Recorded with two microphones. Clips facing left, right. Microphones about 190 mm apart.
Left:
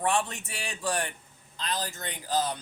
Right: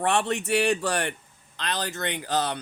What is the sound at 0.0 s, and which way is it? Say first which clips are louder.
A man's voice: right 4 dB; 70° right (ahead or behind).